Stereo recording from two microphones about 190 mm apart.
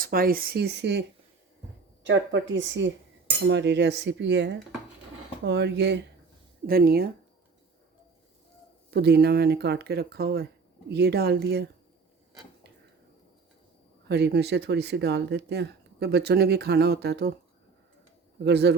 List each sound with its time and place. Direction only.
0.0 s speech: 50° right (ahead or behind)
2.0 s a woman's voice: 70° right (ahead or behind)
6.7 s speech: 50° right (ahead or behind)
8.9 s speech: 60° right (ahead or behind)
14.1 s speech: 60° right (ahead or behind)
18.4 s speech: 60° right (ahead or behind)